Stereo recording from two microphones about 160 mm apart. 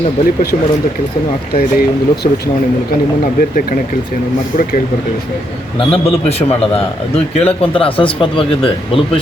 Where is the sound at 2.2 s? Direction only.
55° left (ahead or behind).